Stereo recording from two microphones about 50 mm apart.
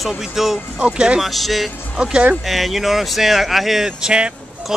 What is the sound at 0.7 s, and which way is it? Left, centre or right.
Speech, right.